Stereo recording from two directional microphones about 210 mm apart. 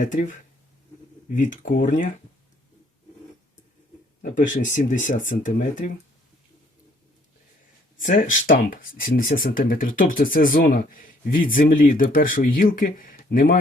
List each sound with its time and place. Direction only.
0.0 s speech: 40° left (ahead or behind)
4.2 s speech: 40° left (ahead or behind)
7.9 s speech: 40° left (ahead or behind)